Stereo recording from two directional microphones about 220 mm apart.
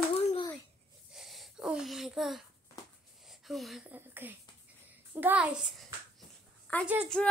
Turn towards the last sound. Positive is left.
turn(degrees=0)  # may be behind; listen again after turning